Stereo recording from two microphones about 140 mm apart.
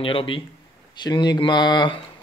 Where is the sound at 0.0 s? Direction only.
40° left (ahead or behind).